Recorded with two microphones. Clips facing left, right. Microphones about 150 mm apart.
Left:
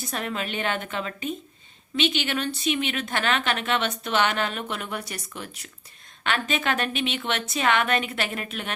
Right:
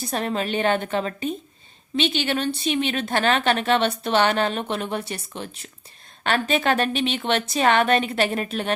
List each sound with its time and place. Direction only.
0.0 s a woman's voice: 35° right (ahead or behind)